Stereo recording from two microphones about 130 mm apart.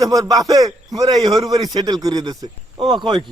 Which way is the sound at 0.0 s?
30° right (ahead or behind).